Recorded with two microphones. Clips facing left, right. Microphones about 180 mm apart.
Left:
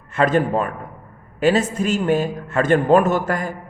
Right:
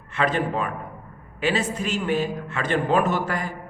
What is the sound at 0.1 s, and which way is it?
A man's voice, 45° left (ahead or behind).